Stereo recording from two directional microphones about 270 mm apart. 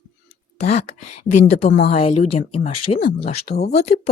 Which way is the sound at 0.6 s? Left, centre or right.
Left.